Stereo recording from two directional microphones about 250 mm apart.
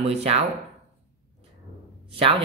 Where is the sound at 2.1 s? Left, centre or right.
Right.